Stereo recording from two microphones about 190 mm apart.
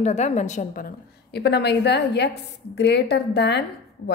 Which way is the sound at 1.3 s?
60° left (ahead or behind).